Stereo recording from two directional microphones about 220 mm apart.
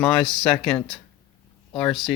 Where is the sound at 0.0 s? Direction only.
5° left (ahead or behind).